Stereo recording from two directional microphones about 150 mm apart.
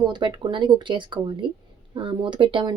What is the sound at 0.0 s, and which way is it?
A woman's voice, 30° right (ahead or behind).